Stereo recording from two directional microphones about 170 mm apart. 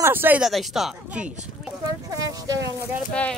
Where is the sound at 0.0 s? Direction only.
10° right (ahead or behind).